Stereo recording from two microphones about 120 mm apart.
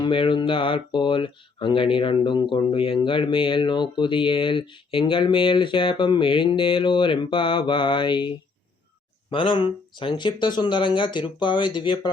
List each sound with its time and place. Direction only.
0.0 s speech: 45° left (ahead or behind)